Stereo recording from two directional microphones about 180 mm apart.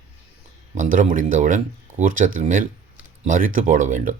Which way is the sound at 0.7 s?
45° right (ahead or behind).